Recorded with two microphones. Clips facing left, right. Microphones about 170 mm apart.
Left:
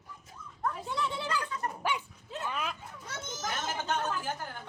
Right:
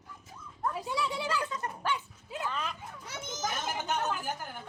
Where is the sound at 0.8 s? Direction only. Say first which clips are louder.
Right 1 dB; 10° right (ahead or behind).